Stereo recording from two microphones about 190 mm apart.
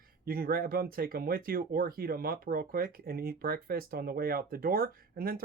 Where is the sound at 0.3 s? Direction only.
50° right (ahead or behind).